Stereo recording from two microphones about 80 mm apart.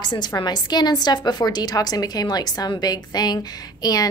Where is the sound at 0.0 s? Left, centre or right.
Left.